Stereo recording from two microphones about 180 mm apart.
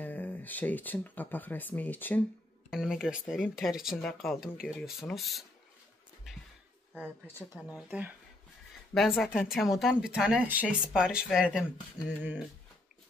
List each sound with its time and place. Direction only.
0.0 s speech: 10° left (ahead or behind)
2.7 s speech: 5° right (ahead or behind)
6.3 s a sound: centre (ahead or behind)
7.5 s speech: 10° right (ahead or behind)
12.0 s speech: 20° left (ahead or behind)